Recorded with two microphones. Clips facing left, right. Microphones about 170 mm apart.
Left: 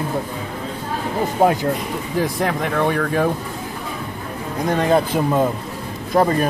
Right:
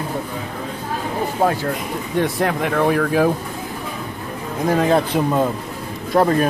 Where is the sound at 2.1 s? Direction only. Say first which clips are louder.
Right 2 dB; centre (ahead or behind).